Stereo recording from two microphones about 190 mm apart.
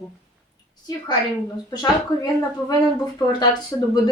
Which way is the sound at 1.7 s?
20° left (ahead or behind).